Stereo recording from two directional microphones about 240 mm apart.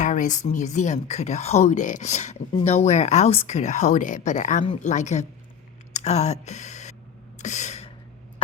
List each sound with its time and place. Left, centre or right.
0.0 s speech: left
7.3 s gasp: left